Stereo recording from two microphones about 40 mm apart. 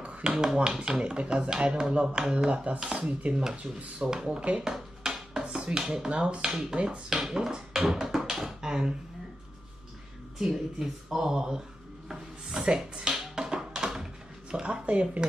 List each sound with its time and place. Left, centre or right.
0.2 s speech: right
2.5 s speech: right
3.4 s speech: centre
4.6 s a sound: centre
6.0 s speech: right
7.1 s speech: centre
7.5 s a sound: centre
10.4 s speech: centre
11.1 s speech: centre
12.6 s music: centre
14.5 s speech: right